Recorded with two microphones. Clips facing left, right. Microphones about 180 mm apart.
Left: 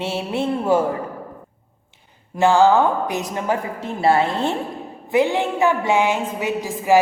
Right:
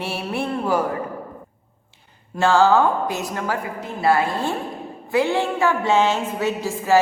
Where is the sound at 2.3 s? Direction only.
15° left (ahead or behind).